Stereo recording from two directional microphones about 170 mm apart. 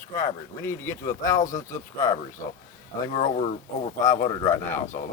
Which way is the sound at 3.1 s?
45° left (ahead or behind).